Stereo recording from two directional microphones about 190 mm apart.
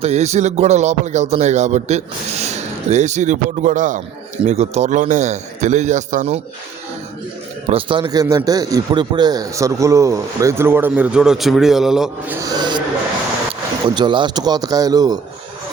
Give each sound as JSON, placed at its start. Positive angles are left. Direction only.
{"t": 0.0, "sound": "speech", "side_deg": -35}
{"t": 7.7, "sound": "a man's voice", "side_deg": -25}
{"t": 12.4, "sound": "a sound", "side_deg": -20}
{"t": 13.8, "sound": "speech", "side_deg": -25}